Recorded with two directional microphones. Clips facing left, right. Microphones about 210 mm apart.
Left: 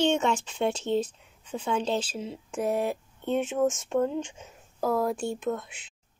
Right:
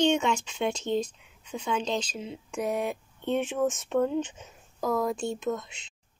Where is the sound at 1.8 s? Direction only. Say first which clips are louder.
Left 2 dB; 5° left (ahead or behind).